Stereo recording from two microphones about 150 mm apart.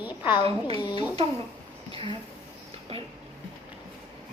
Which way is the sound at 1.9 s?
35° right (ahead or behind).